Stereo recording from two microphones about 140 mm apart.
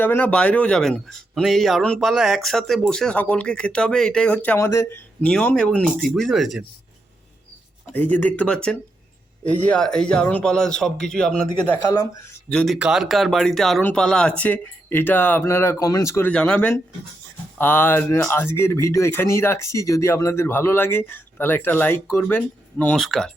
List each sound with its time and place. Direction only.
0.0 s speech: 10° left (ahead or behind)
5.2 s speech: 10° left (ahead or behind)
7.9 s speech: 10° left (ahead or behind)
16.3 s speech: 5° left (ahead or behind)